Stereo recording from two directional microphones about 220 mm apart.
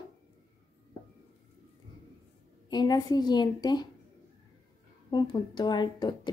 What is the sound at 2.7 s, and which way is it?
A woman's voice, 20° left (ahead or behind).